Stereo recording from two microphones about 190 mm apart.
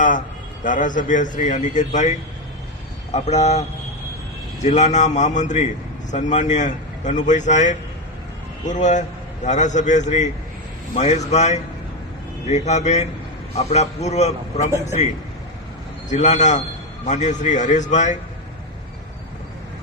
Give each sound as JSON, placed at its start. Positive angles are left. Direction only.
{"t": 0.6, "sound": "a man's voice", "side_deg": 45}
{"t": 4.6, "sound": "a man's voice", "side_deg": 40}
{"t": 16.0, "sound": "a man's voice", "side_deg": 35}